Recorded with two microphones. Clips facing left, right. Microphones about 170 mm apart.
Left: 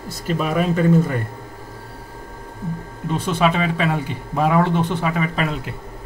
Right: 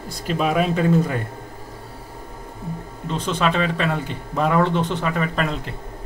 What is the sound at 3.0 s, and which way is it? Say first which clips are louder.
Speech: left 3 dB; 10° left (ahead or behind).